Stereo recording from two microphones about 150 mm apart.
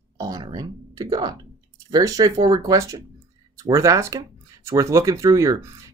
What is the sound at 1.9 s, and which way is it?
Speech, 25° right (ahead or behind).